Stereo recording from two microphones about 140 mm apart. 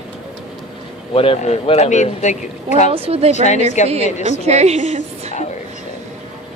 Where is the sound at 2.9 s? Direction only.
45° right (ahead or behind).